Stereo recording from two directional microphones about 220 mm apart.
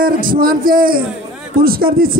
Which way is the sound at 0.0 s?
40° right (ahead or behind).